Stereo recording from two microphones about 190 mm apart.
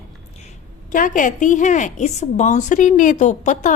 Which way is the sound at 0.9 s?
40° left (ahead or behind).